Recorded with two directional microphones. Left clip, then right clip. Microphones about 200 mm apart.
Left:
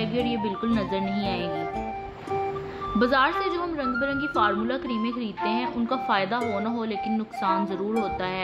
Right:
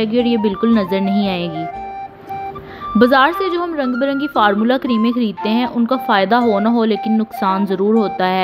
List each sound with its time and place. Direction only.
0.0 s speech: 45° right (ahead or behind)
3.0 s a woman's voice: 40° right (ahead or behind)